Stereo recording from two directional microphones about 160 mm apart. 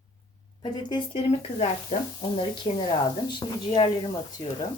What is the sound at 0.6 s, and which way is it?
Speech, 30° left (ahead or behind).